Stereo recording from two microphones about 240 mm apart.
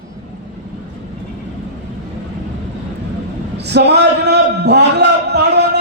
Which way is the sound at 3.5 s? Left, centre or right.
Right.